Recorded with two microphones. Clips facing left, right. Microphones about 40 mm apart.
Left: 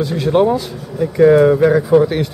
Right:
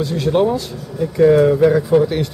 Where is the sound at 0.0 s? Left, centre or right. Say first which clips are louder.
Left 2 dB; centre.